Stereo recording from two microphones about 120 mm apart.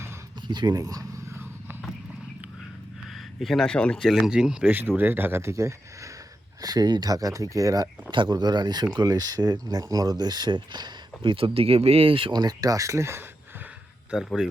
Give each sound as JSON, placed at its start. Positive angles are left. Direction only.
{"t": 0.4, "sound": "a sound", "side_deg": -35}
{"t": 3.4, "sound": "speech", "side_deg": 5}
{"t": 8.1, "sound": "speech", "side_deg": -40}
{"t": 14.1, "sound": "speech", "side_deg": -5}